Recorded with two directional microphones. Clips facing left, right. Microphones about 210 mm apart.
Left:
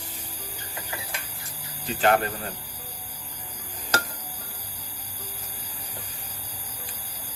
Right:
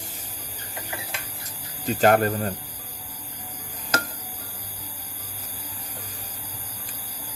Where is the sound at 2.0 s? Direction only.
40° right (ahead or behind).